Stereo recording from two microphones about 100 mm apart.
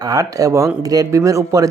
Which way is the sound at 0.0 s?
35° right (ahead or behind).